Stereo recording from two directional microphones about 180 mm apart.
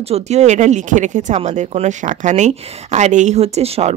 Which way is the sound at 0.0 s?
35° right (ahead or behind).